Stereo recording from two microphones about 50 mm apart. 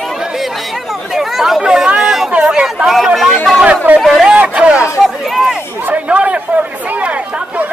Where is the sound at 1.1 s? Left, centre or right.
Centre.